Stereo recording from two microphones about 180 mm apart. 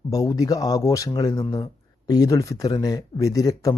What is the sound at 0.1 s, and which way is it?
Speech, 20° left (ahead or behind).